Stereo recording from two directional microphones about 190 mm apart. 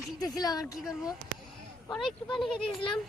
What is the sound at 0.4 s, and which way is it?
Speech, 20° left (ahead or behind).